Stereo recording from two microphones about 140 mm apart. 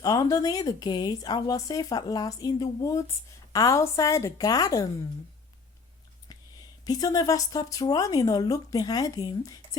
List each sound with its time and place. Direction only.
0.0 s speech: 25° left (ahead or behind)
6.8 s speech: 30° left (ahead or behind)